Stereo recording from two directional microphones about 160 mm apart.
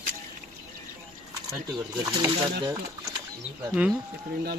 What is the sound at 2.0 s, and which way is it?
Speech, 20° right (ahead or behind).